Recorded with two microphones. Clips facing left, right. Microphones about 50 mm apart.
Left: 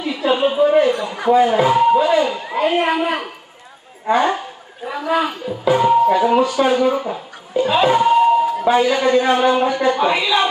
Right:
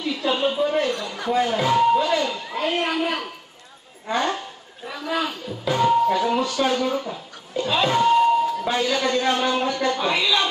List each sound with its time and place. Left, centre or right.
0.0 s speech: centre